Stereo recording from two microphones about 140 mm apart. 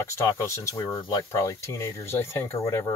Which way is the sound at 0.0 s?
20° left (ahead or behind).